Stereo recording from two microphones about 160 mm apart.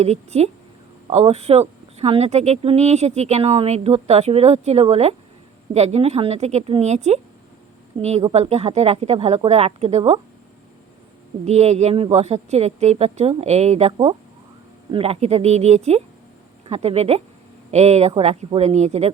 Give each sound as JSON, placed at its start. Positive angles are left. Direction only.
{"t": 0.0, "sound": "a woman's voice", "side_deg": -40}
{"t": 11.4, "sound": "a woman's voice", "side_deg": -45}